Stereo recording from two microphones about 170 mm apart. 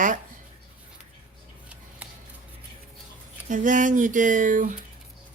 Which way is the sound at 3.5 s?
50° right (ahead or behind).